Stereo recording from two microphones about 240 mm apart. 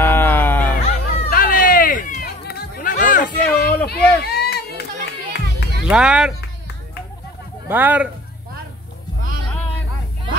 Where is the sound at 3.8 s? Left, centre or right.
Left.